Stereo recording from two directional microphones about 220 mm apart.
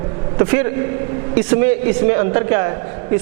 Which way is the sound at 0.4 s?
15° right (ahead or behind).